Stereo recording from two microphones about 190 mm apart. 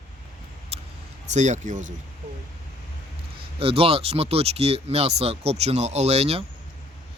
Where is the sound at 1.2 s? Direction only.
40° right (ahead or behind).